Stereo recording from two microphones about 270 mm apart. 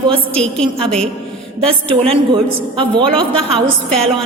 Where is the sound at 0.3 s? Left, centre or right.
Centre.